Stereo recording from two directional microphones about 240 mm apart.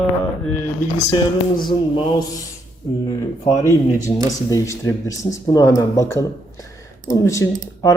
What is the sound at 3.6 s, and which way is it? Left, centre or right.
Speech, centre.